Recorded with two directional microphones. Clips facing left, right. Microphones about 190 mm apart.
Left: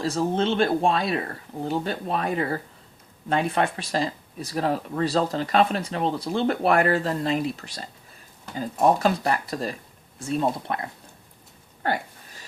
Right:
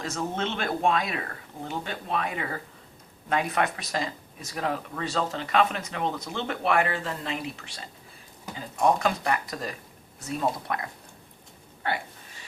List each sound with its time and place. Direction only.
0.0 s speech: 30° left (ahead or behind)
11.8 s speech: 40° left (ahead or behind)